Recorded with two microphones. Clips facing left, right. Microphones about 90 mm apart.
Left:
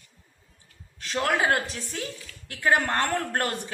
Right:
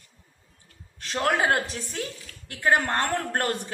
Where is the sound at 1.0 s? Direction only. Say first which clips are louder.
Right 1 dB; 30° right (ahead or behind).